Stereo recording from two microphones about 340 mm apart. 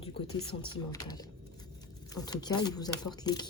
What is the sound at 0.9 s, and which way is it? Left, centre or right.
Speech, centre.